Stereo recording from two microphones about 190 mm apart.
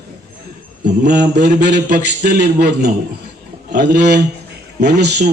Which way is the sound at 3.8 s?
60° right (ahead or behind).